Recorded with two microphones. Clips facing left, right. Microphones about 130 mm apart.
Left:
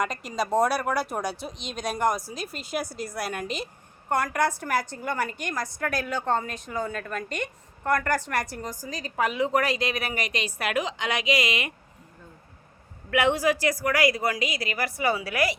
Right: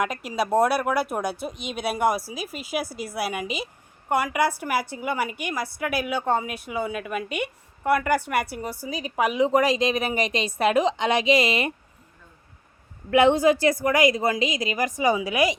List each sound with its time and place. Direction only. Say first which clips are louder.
0.0 s a woman's voice: right 2 dB; 5° right (ahead or behind); by 11.7 s 30° right (ahead or behind)
13.1 s a woman's voice: right 5 dB; 25° right (ahead or behind)